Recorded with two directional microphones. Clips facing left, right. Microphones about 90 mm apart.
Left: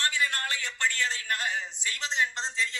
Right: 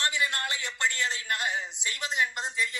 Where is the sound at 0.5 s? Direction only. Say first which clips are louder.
Even; 25° right (ahead or behind).